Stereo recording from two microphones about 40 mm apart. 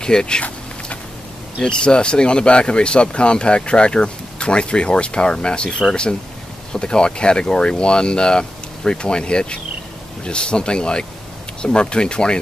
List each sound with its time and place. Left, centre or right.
0.0 s speech: centre
1.6 s speech: left